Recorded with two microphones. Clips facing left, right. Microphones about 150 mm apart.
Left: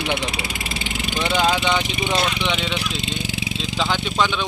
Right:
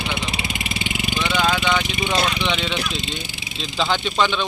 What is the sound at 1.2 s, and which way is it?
Speech, 35° left (ahead or behind).